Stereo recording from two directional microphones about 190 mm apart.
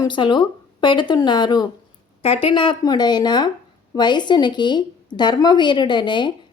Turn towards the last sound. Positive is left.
turn(degrees=25)  # may be behind; listen again after turning